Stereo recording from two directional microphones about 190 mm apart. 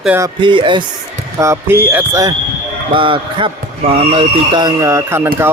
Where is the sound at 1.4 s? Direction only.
15° right (ahead or behind).